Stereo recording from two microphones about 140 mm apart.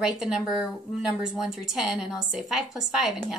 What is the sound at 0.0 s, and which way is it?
Speech, 5° right (ahead or behind).